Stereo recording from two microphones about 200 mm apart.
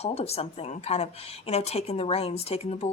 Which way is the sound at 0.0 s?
30° left (ahead or behind).